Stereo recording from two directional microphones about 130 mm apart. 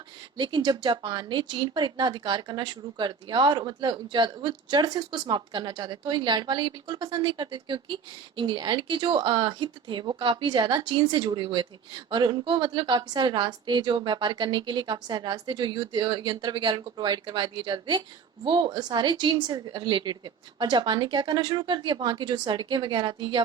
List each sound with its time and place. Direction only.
0.3 s speech: 35° right (ahead or behind)